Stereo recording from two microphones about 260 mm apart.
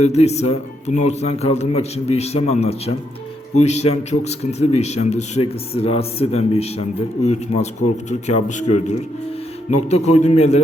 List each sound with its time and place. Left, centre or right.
0.0 s speech: left